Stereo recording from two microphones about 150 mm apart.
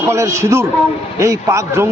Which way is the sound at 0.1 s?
20° right (ahead or behind).